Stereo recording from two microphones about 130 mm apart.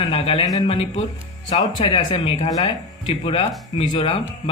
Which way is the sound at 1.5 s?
35° left (ahead or behind).